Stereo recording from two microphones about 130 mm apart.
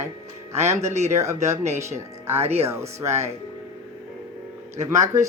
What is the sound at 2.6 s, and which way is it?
Speech, 20° right (ahead or behind).